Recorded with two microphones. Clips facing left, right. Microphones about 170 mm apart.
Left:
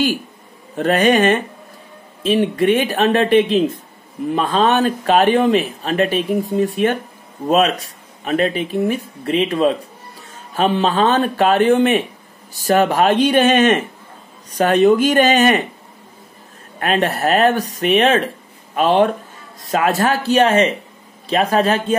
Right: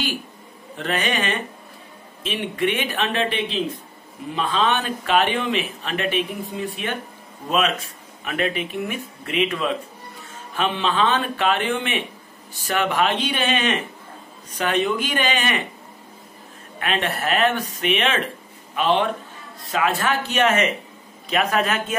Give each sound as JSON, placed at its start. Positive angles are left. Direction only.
{"t": 0.7, "sound": "speech", "side_deg": 45}
{"t": 16.8, "sound": "speech", "side_deg": 40}